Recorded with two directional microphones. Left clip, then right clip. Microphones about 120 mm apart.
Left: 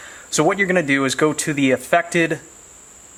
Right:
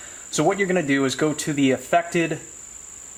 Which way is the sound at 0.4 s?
45° left (ahead or behind).